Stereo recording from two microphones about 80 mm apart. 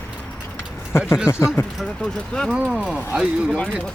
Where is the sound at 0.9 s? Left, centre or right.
Left.